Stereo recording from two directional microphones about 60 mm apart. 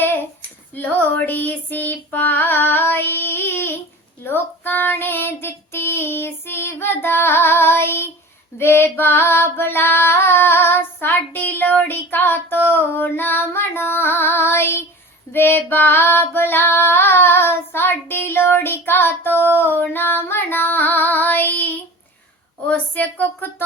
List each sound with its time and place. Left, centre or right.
0.0 s a sound: left
0.8 s female singing: left
22.6 s a woman's voice: left